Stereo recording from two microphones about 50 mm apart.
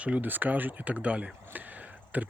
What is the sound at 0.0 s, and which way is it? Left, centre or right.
Speech, right.